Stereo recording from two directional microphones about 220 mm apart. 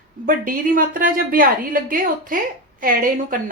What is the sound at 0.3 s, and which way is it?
Speech, 40° right (ahead or behind).